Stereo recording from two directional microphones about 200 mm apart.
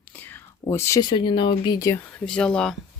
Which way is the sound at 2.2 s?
5° left (ahead or behind).